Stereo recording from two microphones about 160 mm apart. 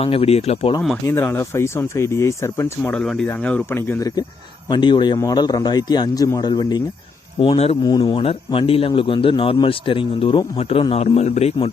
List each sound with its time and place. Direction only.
0.0 s speech: 35° left (ahead or behind)
1.0 s speech: 15° left (ahead or behind)
2.9 s speech: 5° left (ahead or behind); by 11.7 s 40° left (ahead or behind)